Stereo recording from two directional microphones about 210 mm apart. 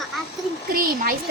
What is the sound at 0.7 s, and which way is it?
Speech, 40° right (ahead or behind).